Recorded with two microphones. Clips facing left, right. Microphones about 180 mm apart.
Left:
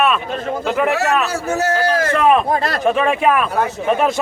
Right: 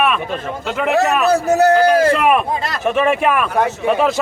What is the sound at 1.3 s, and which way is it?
Speech, 35° right (ahead or behind).